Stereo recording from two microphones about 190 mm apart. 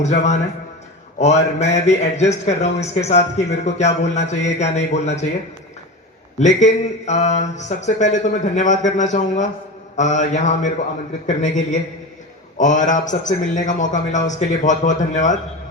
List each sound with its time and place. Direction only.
0.0 s speech: 35° left (ahead or behind)
6.4 s speech: 40° left (ahead or behind)